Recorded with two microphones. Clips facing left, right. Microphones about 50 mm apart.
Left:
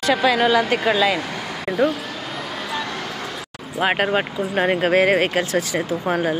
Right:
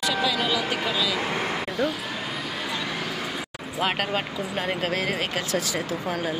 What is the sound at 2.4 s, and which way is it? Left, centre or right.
Vehicle, centre.